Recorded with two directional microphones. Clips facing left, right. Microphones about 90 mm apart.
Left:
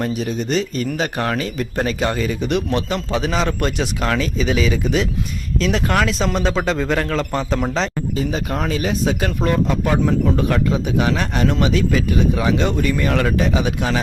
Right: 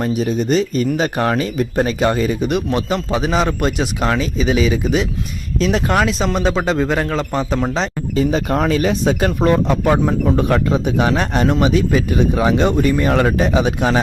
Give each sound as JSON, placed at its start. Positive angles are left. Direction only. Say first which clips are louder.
{"t": 0.0, "sound": "speech", "louder": "right 4 dB", "side_deg": -20}
{"t": 2.4, "sound": "a man's voice", "louder": "right 2 dB", "side_deg": -10}
{"t": 5.9, "sound": "a man's voice", "louder": "right 2 dB", "side_deg": -15}
{"t": 6.1, "sound": "a man's voice", "louder": "right 2 dB", "side_deg": -5}
{"t": 8.1, "sound": "speech", "louder": "right 5 dB", "side_deg": -45}
{"t": 11.4, "sound": "speech", "louder": "right 2 dB", "side_deg": -20}
{"t": 11.9, "sound": "speech", "louder": "right 2 dB", "side_deg": -30}